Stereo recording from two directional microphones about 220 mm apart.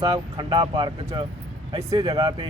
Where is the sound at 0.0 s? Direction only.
20° right (ahead or behind).